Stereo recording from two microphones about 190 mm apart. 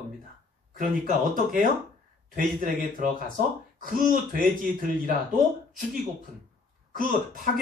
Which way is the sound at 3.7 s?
45° right (ahead or behind).